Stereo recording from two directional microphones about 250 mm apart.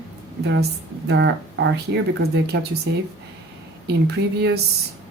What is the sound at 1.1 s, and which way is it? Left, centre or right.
Speech, right.